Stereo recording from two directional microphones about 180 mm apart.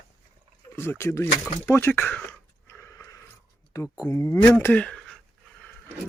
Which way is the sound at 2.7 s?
15° left (ahead or behind).